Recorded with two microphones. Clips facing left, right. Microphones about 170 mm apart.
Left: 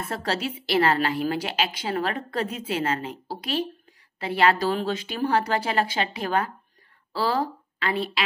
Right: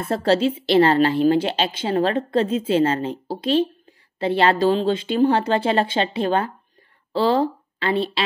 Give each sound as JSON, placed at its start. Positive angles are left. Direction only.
{"t": 0.0, "sound": "a woman's voice", "side_deg": -30}